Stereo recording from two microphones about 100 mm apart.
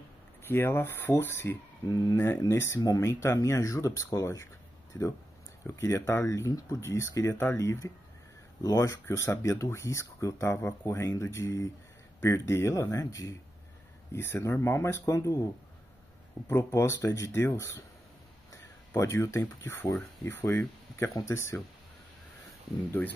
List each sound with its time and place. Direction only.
0.5 s speech: 25° left (ahead or behind)
1.9 s speech: 40° left (ahead or behind)
2.1 s speech: 20° left (ahead or behind)
14.1 s speech: 25° left (ahead or behind)
16.4 s speech: 25° left (ahead or behind)
18.5 s a sound: 30° left (ahead or behind)
19.4 s speech: 20° left (ahead or behind)
23.0 s speech: 20° left (ahead or behind)